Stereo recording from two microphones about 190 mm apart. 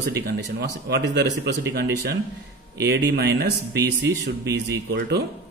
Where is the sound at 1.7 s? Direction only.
55° right (ahead or behind).